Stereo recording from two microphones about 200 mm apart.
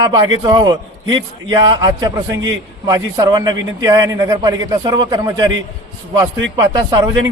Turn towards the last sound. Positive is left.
turn(degrees=-20)  # may be behind; listen again after turning